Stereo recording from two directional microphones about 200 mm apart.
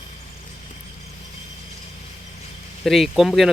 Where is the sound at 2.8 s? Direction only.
Centre (ahead or behind).